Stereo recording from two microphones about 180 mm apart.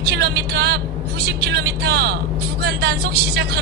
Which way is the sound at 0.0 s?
65° right (ahead or behind).